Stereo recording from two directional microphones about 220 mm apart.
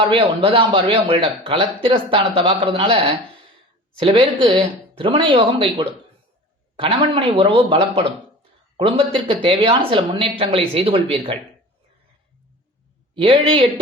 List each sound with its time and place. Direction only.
0.0 s a man's voice: 25° right (ahead or behind)
13.1 s a man's voice: 25° right (ahead or behind)